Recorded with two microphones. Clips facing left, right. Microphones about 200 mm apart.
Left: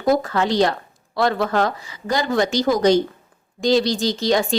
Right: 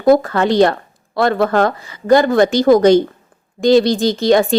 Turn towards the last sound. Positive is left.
turn(degrees=-55)  # may be behind; listen again after turning